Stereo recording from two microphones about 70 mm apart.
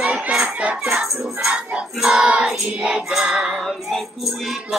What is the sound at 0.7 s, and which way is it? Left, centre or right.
Music, centre.